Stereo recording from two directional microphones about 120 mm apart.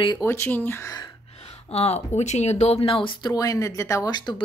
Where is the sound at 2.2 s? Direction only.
70° left (ahead or behind).